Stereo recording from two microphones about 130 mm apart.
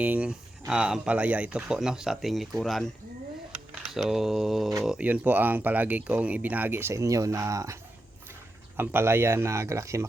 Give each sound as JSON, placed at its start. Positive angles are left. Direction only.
{"t": 0.0, "sound": "speech", "side_deg": -10}
{"t": 3.9, "sound": "speech", "side_deg": 0}